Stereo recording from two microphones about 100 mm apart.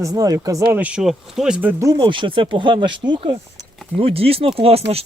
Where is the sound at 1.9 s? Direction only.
55° right (ahead or behind).